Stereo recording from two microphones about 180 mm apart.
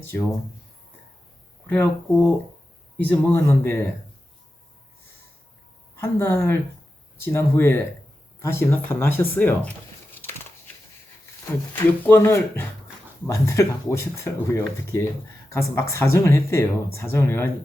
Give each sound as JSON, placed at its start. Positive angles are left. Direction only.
{"t": 0.0, "sound": "speech", "side_deg": 15}
{"t": 1.6, "sound": "speech", "side_deg": 10}
{"t": 3.0, "sound": "speech", "side_deg": 10}
{"t": 6.0, "sound": "speech", "side_deg": 15}
{"t": 11.4, "sound": "speech", "side_deg": 10}